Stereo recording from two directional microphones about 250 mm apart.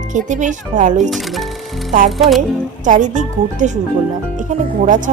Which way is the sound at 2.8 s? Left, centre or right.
Right.